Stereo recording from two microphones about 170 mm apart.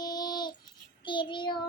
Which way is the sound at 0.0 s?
25° left (ahead or behind).